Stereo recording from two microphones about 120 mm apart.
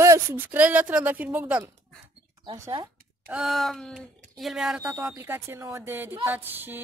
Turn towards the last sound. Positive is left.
turn(degrees=-15)  # may be behind; listen again after turning